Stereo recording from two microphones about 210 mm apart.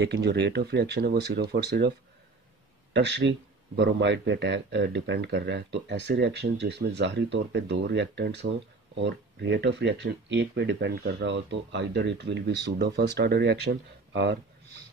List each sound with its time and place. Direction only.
0.0 s speech: 50° right (ahead or behind)
2.9 s a man's voice: 55° right (ahead or behind)